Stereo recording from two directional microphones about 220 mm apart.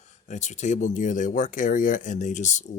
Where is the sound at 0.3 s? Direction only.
35° left (ahead or behind).